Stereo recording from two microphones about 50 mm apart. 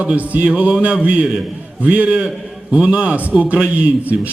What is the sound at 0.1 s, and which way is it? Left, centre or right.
Speech, right.